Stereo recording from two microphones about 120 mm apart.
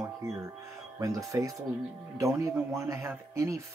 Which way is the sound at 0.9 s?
25° right (ahead or behind).